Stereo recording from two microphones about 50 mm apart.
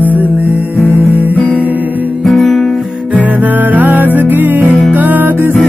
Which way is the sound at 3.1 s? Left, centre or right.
Right.